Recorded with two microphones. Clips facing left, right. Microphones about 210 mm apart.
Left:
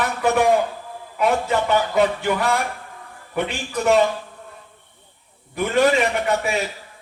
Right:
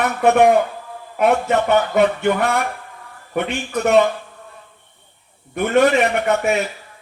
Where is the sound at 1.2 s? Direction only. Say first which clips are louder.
Right 3 dB; 60° right (ahead or behind).